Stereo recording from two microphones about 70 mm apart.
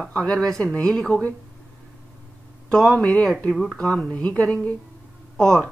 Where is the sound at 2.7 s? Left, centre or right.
Centre.